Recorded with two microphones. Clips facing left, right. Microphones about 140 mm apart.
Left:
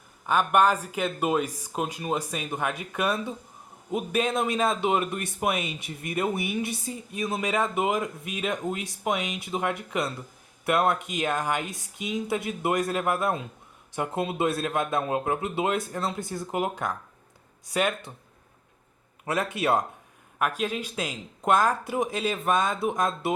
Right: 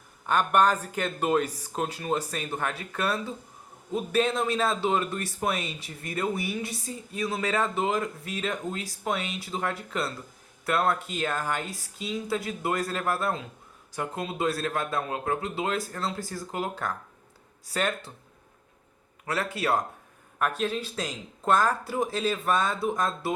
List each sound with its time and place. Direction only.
0.3 s a man's voice: 10° left (ahead or behind)
19.2 s a man's voice: 20° left (ahead or behind)
20.4 s speech: 10° left (ahead or behind)